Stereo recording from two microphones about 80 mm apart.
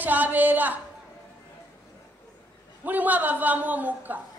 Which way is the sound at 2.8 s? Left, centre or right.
Right.